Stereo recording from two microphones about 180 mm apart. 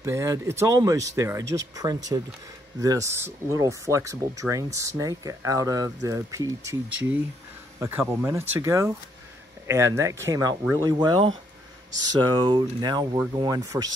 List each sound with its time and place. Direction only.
0.0 s speech: 15° right (ahead or behind)
8.1 s speech: 15° right (ahead or behind)